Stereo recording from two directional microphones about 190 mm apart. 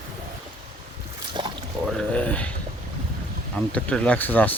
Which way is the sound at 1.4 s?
25° right (ahead or behind).